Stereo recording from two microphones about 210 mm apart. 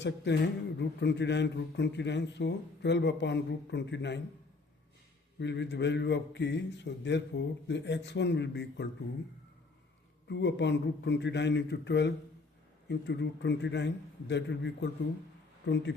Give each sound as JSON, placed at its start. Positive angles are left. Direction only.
{"t": 0.3, "sound": "a man's voice", "side_deg": 55}
{"t": 5.4, "sound": "a man's voice", "side_deg": 55}
{"t": 10.2, "sound": "a man's voice", "side_deg": 55}